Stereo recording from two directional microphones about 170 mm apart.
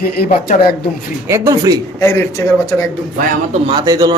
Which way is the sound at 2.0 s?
15° left (ahead or behind).